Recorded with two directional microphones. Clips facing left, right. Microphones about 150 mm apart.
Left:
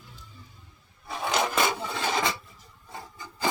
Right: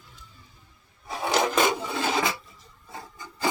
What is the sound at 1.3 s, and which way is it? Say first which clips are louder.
Filing: right 3 dB; 15° right (ahead or behind).